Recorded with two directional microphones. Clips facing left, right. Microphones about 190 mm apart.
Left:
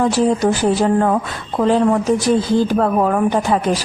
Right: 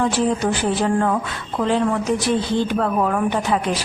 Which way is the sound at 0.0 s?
40° left (ahead or behind).